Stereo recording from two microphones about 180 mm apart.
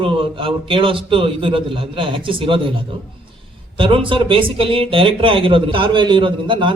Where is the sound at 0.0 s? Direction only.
30° right (ahead or behind).